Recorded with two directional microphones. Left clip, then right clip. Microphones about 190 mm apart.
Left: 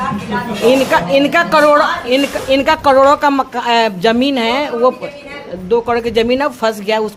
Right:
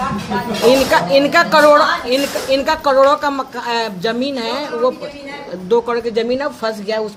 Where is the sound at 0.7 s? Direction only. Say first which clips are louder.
Left 1 dB; 20° left (ahead or behind).